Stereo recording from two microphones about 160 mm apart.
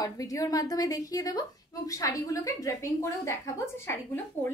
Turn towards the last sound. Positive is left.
turn(degrees=15)  # may be behind; listen again after turning